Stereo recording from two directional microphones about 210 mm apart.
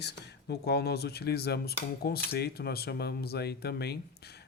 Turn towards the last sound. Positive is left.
turn(degrees=50)  # may be behind; listen again after turning